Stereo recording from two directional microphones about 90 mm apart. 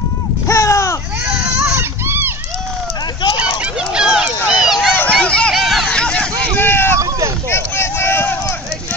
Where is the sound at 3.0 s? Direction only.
55° left (ahead or behind).